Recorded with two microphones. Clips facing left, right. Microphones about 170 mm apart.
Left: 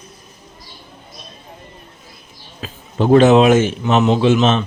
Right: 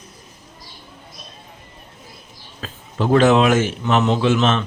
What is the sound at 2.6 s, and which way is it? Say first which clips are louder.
Speech: left 4 dB; 20° left (ahead or behind).